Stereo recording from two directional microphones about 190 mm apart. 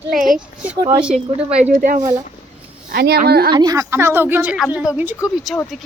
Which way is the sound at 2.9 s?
60° right (ahead or behind).